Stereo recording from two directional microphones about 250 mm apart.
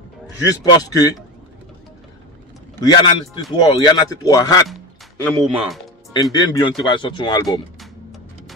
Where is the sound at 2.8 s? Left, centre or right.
Centre.